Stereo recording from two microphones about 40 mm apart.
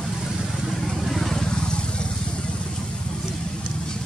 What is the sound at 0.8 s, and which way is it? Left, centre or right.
Vehicle, centre.